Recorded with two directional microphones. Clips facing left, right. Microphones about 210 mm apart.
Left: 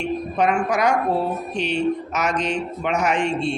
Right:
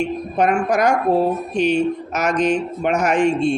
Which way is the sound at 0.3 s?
50° right (ahead or behind).